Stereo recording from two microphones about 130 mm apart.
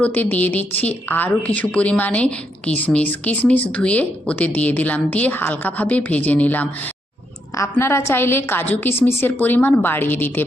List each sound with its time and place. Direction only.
0.0 s a woman's voice: 10° left (ahead or behind)